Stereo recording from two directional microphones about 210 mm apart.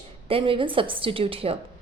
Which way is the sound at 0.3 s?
25° right (ahead or behind).